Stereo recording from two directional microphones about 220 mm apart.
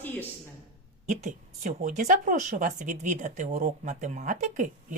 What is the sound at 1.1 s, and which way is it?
Speech, 35° right (ahead or behind).